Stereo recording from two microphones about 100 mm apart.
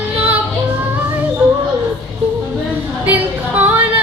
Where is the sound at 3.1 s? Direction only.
15° right (ahead or behind).